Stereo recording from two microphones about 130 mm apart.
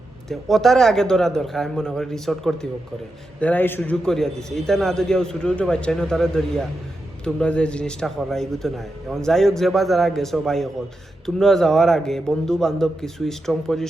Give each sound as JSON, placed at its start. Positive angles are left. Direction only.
{"t": 0.3, "sound": "a man's voice", "side_deg": 0}
{"t": 3.4, "sound": "a man's voice", "side_deg": 15}